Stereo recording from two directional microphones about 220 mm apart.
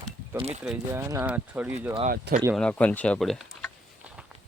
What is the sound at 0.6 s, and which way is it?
Speech, 10° right (ahead or behind).